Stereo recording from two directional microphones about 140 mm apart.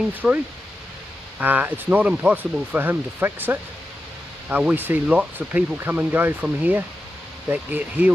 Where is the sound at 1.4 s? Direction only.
10° right (ahead or behind).